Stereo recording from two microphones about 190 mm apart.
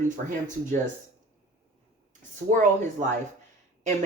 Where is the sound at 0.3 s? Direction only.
40° right (ahead or behind).